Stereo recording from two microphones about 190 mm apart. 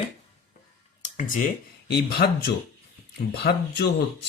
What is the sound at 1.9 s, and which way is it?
Speech, 60° left (ahead or behind).